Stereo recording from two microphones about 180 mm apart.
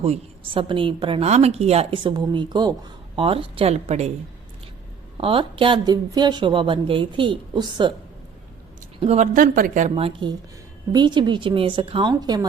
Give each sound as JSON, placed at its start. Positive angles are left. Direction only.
{"t": 0.0, "sound": "speech", "side_deg": -30}
{"t": 5.1, "sound": "speech", "side_deg": -30}
{"t": 9.0, "sound": "a woman's voice", "side_deg": -35}
{"t": 9.9, "sound": "speech", "side_deg": -30}